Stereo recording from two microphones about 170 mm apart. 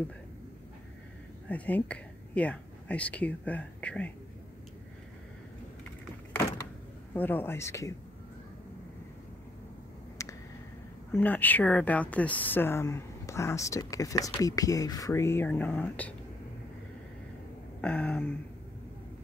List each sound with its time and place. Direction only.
1.5 s speech: 10° left (ahead or behind)
7.2 s speech: 10° left (ahead or behind)
10.2 s a sound: 20° left (ahead or behind)
11.1 s speech: 10° left (ahead or behind)
17.8 s speech: 5° left (ahead or behind)